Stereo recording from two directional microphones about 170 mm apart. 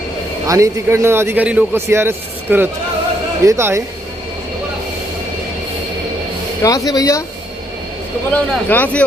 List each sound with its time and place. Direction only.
0.4 s a man's voice: 20° right (ahead or behind)
6.6 s speech: 20° left (ahead or behind)
8.3 s a man's voice: 10° left (ahead or behind)